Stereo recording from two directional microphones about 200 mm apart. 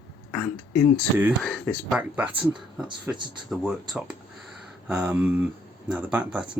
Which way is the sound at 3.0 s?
Centre (ahead or behind).